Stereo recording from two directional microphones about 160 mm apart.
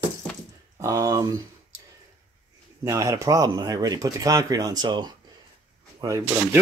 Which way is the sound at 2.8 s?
20° right (ahead or behind).